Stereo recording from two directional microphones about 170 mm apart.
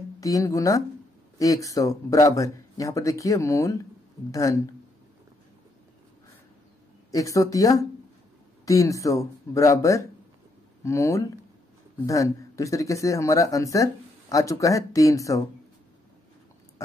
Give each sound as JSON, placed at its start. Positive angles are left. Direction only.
{"t": 0.2, "sound": "speech", "side_deg": 20}
{"t": 7.1, "sound": "speech", "side_deg": 20}